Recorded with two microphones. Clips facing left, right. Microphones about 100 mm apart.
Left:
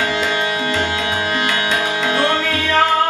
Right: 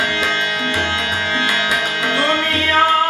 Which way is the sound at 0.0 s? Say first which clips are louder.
Left 1 dB; 15° left (ahead or behind).